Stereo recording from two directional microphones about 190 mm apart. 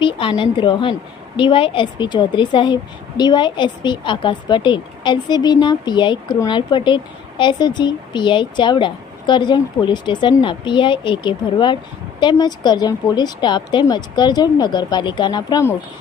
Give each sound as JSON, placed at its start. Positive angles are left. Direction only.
{"t": 0.0, "sound": "a woman's voice", "side_deg": 25}